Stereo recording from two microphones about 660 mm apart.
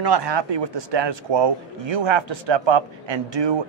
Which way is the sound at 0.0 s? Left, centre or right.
Right.